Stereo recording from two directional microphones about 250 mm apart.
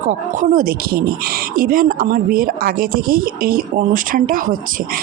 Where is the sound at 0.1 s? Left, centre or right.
Right.